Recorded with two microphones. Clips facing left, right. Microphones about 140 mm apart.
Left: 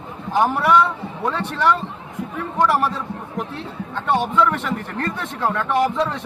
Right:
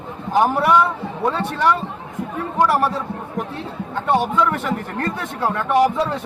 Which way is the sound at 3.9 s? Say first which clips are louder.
Right 1 dB; 10° right (ahead or behind).